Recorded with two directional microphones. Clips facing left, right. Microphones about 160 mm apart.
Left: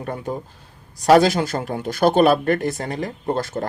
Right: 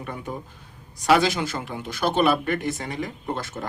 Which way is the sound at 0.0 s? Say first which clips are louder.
Left 6 dB; 40° left (ahead or behind).